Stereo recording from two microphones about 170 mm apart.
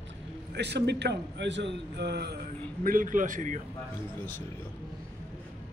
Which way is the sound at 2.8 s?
55° right (ahead or behind).